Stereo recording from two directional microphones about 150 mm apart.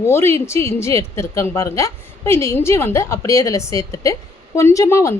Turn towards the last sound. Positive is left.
turn(degrees=20)  # may be behind; listen again after turning